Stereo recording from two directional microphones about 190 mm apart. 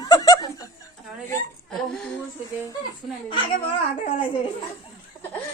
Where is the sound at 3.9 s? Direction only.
30° left (ahead or behind).